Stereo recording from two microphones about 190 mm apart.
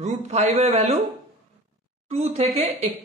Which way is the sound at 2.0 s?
35° right (ahead or behind).